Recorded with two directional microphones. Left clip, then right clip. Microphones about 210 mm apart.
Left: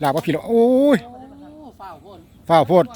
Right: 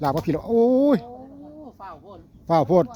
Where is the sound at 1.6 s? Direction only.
30° right (ahead or behind).